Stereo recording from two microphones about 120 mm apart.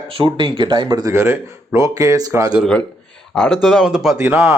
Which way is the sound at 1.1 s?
20° right (ahead or behind).